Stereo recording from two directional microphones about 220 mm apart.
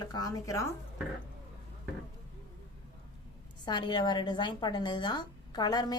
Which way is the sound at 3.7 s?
20° left (ahead or behind).